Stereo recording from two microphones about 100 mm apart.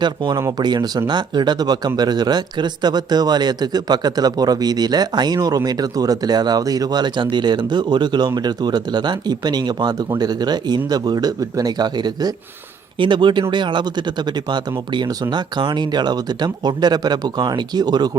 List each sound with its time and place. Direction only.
0.0 s speech: 45° right (ahead or behind)